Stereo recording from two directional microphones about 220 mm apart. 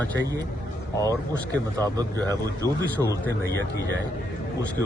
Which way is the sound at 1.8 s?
15° right (ahead or behind).